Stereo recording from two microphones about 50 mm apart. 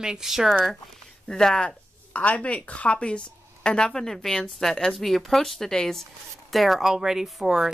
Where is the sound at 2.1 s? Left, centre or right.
Left; by 6.1 s centre.